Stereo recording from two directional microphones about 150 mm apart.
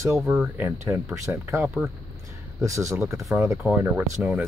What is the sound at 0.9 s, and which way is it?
Speech, 15° right (ahead or behind).